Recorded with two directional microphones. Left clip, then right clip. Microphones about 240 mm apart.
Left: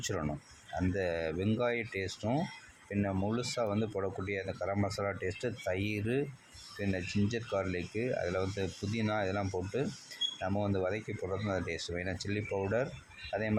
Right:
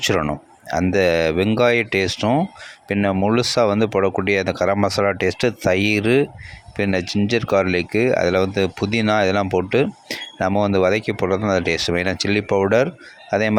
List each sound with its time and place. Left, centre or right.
0.0 s speech: right